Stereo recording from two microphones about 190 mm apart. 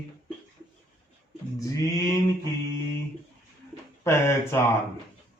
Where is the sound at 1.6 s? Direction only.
20° left (ahead or behind).